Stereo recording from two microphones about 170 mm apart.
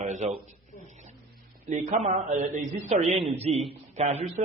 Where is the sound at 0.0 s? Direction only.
45° right (ahead or behind).